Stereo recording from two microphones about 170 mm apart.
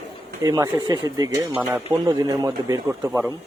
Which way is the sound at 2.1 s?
20° right (ahead or behind).